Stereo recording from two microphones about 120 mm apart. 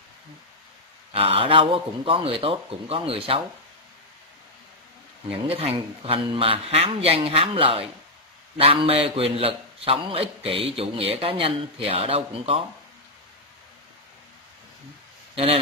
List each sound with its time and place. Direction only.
1.1 s a man's voice: 50° right (ahead or behind)
5.3 s a man's voice: 55° right (ahead or behind)